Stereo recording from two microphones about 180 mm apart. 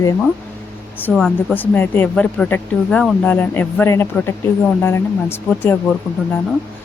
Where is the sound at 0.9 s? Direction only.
5° left (ahead or behind).